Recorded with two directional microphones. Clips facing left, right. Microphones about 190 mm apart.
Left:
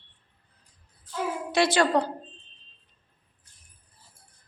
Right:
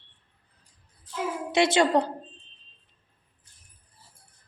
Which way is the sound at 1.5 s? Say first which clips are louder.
Right 1 dB; 20° right (ahead or behind).